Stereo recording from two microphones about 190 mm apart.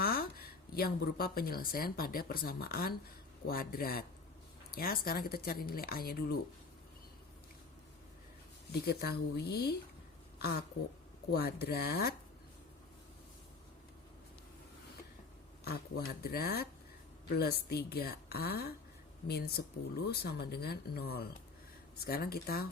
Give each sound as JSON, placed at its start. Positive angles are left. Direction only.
{"t": 0.0, "sound": "speech", "side_deg": 50}
{"t": 8.8, "sound": "a woman's voice", "side_deg": 55}
{"t": 10.3, "sound": "a sound", "side_deg": 55}
{"t": 11.3, "sound": "a woman's voice", "side_deg": 55}
{"t": 15.6, "sound": "a woman's voice", "side_deg": 55}